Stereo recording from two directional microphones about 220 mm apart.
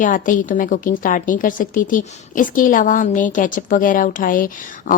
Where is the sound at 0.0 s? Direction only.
35° left (ahead or behind).